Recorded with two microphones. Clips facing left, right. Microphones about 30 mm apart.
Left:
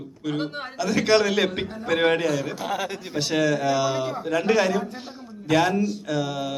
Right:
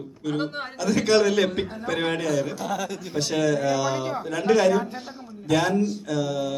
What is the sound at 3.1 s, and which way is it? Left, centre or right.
A man's voice, centre.